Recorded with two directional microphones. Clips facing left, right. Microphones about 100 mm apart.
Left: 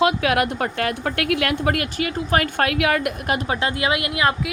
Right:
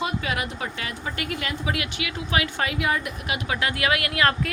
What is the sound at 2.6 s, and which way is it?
A woman's voice, 70° left (ahead or behind).